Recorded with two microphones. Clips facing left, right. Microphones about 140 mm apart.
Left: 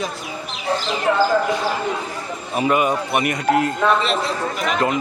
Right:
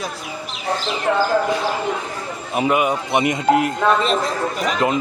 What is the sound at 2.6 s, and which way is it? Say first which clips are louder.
A man's voice: even; 10° right (ahead or behind).